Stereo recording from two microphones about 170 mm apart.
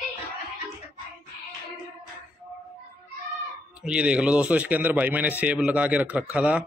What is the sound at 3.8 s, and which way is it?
A man's voice, 5° right (ahead or behind).